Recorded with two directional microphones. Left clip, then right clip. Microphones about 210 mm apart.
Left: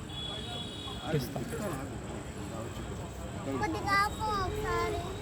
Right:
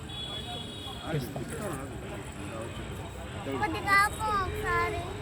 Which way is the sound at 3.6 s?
Centre (ahead or behind).